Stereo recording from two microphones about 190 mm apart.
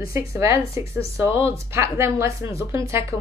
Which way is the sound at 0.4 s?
15° right (ahead or behind).